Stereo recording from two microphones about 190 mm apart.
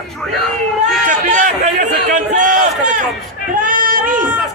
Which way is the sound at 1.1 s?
40° right (ahead or behind).